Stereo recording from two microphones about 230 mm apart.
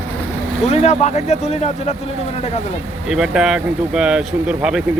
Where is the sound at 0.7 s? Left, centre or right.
Left.